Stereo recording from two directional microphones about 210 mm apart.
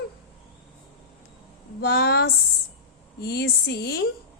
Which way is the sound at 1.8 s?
50° left (ahead or behind).